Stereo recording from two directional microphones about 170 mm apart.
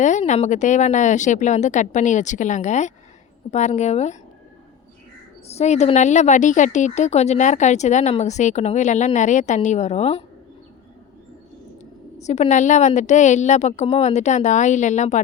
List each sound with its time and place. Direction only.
0.0 s a woman's voice: 45° left (ahead or behind)
5.5 s a woman's voice: 40° left (ahead or behind)
12.1 s a woman's voice: 40° left (ahead or behind)